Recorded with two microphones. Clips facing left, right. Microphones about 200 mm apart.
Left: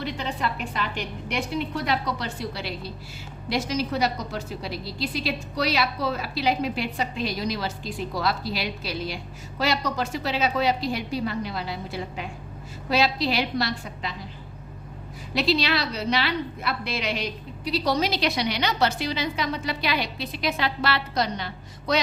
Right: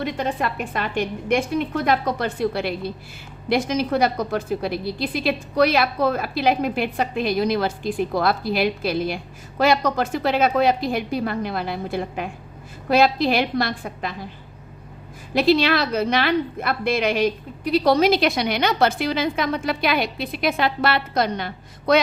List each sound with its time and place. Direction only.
0.0 s a woman's voice: 50° right (ahead or behind)
15.4 s a woman's voice: 50° right (ahead or behind)